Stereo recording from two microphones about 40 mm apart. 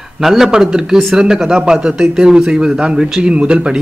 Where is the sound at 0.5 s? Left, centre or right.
Centre.